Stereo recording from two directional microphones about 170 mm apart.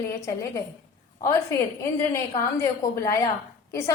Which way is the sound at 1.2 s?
20° left (ahead or behind).